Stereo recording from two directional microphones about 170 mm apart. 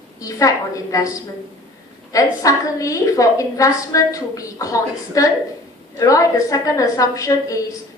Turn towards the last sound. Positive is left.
turn(degrees=20)  # may be behind; listen again after turning